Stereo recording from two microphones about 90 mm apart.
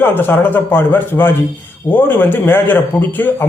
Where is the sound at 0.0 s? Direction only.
25° left (ahead or behind).